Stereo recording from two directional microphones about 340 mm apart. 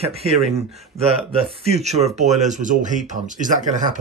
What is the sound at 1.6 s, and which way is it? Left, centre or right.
Speech, centre.